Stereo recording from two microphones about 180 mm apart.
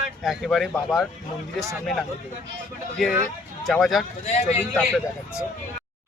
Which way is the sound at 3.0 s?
Centre (ahead or behind).